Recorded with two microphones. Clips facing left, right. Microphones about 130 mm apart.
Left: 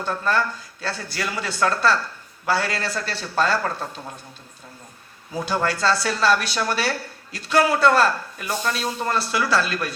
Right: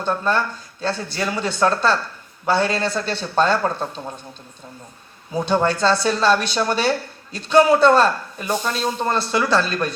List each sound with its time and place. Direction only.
0.0 s a man's voice: 20° right (ahead or behind)
5.3 s a man's voice: 20° right (ahead or behind)